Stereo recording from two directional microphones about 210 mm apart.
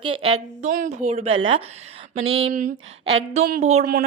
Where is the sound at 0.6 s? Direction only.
35° right (ahead or behind).